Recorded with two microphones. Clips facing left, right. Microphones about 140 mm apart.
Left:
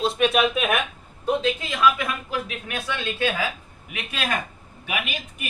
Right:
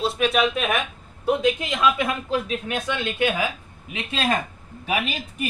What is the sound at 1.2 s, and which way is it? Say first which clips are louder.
A man's voice: right 2 dB; 15° right (ahead or behind).